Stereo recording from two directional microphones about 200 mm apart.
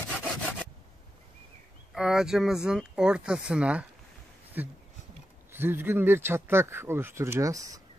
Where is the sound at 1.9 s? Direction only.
5° right (ahead or behind).